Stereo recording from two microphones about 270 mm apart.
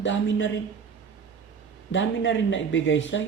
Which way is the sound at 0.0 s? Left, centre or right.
Left.